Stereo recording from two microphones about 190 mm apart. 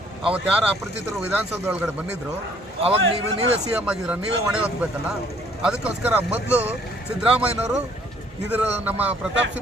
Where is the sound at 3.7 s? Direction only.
5° right (ahead or behind).